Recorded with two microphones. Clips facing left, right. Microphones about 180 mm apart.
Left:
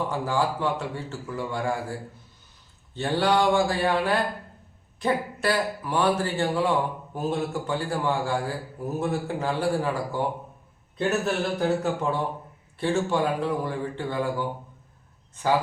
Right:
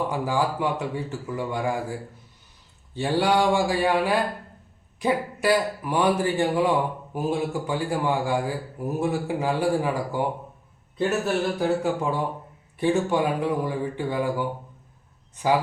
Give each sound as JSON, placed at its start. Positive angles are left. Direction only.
{"t": 0.1, "sound": "a man's voice", "side_deg": -15}
{"t": 11.8, "sound": "a man's voice", "side_deg": -10}